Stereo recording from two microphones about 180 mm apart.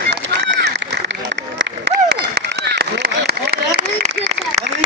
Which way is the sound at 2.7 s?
65° right (ahead or behind).